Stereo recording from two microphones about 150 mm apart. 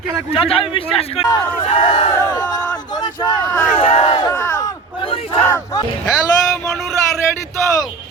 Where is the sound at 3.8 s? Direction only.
40° left (ahead or behind).